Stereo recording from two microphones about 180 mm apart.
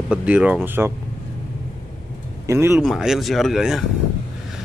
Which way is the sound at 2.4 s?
15° right (ahead or behind).